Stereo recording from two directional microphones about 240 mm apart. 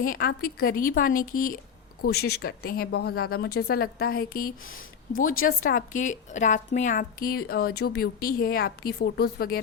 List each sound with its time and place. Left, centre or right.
0.0 s a woman's voice: left